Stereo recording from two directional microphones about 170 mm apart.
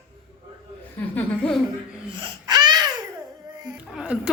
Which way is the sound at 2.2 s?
25° right (ahead or behind).